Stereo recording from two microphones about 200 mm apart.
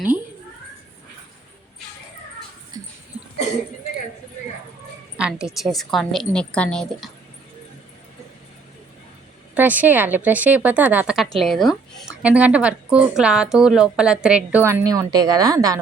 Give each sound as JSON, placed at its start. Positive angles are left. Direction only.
{"t": 2.8, "sound": "a sound", "side_deg": -20}
{"t": 5.1, "sound": "a woman's voice", "side_deg": -5}
{"t": 9.6, "sound": "a woman's voice", "side_deg": -10}